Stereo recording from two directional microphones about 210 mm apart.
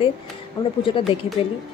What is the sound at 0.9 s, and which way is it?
Speech, 25° left (ahead or behind).